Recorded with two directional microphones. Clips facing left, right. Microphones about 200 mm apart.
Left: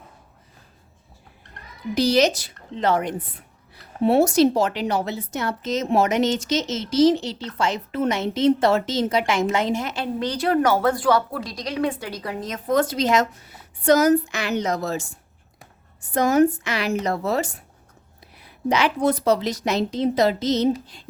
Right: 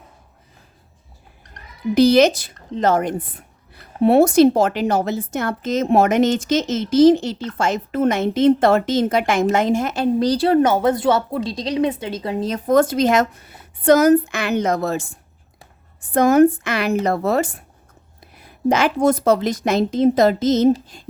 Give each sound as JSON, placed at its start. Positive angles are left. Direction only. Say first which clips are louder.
{"t": 2.0, "sound": "a woman's voice", "louder": "right 6 dB", "side_deg": -55}